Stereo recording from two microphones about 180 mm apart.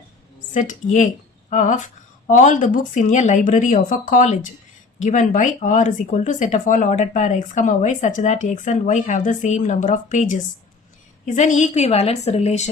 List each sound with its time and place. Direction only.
0.5 s a woman's voice: 45° left (ahead or behind)